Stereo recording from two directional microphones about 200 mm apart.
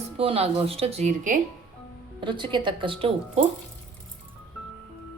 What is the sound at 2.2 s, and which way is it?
Speech, 25° right (ahead or behind).